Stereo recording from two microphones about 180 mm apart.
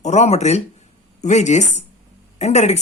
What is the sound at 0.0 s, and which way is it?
Speech, 40° left (ahead or behind).